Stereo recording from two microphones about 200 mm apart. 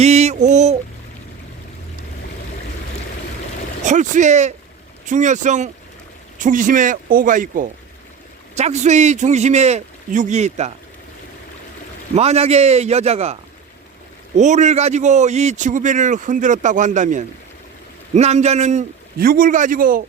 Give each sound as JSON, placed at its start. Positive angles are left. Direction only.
{"t": 0.0, "sound": "a man's voice", "side_deg": -35}
{"t": 3.8, "sound": "a man's voice", "side_deg": -40}
{"t": 12.1, "sound": "a man's voice", "side_deg": -30}
{"t": 14.3, "sound": "a man's voice", "side_deg": -35}